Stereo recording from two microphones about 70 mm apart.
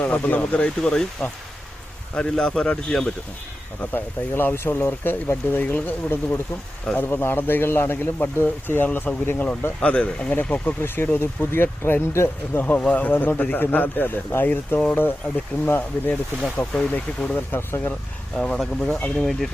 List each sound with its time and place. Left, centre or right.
0.0 s a man's voice: left
3.8 s speech: left
10.3 s speech: left
12.6 s speech: left
16.6 s speech: left
17.5 s speech: left
18.3 s a man's voice: centre